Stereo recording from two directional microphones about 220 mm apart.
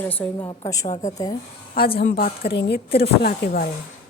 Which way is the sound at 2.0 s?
45° left (ahead or behind).